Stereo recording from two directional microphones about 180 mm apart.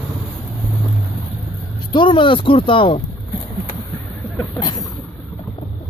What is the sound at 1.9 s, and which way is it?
Speech, 30° left (ahead or behind).